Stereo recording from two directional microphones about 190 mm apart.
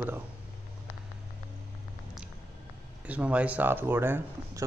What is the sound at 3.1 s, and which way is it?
Speech, 5° right (ahead or behind).